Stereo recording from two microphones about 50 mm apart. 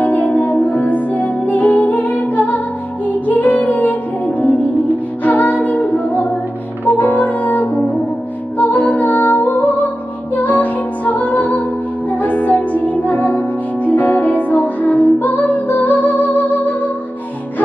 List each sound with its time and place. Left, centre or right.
0.0 s music: left